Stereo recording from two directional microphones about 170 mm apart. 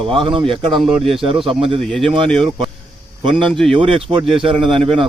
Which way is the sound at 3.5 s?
Centre (ahead or behind).